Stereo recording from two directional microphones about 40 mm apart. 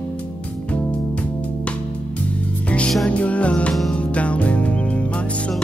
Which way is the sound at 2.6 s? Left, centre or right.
Left.